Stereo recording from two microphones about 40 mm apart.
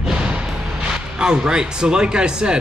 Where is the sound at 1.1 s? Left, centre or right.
Right.